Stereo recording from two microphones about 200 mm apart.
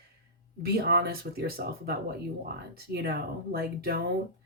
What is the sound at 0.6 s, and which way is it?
Speech, 55° right (ahead or behind).